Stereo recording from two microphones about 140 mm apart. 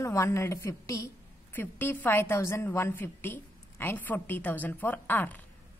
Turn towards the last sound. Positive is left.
turn(degrees=15)  # may be behind; listen again after turning